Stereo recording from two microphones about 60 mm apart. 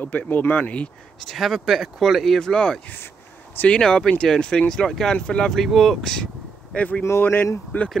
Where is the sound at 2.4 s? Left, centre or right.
Centre.